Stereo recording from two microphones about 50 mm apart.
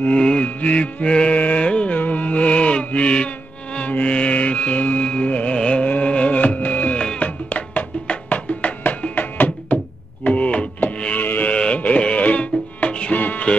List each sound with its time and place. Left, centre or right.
0.2 s mantra: centre
0.5 s music: left
1.7 s carnatic music: left
2.0 s music: left
10.2 s a sound: left
11.1 s a sound: left
11.5 s music: centre
13.1 s music: left